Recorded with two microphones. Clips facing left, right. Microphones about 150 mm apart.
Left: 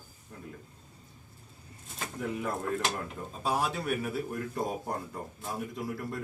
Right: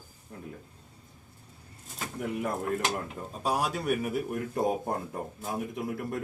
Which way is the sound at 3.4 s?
10° right (ahead or behind).